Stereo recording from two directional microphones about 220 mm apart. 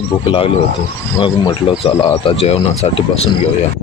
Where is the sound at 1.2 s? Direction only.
25° left (ahead or behind).